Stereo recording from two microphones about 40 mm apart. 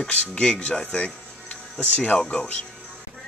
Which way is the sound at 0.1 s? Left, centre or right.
Left.